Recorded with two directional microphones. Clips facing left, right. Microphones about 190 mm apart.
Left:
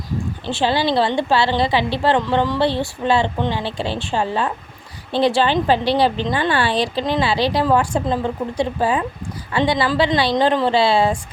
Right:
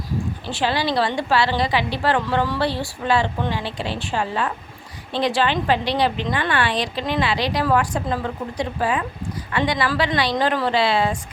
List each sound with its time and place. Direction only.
0.4 s speech: 25° left (ahead or behind)